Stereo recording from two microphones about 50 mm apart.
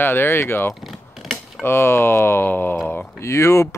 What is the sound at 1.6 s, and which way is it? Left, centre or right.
Speech, left.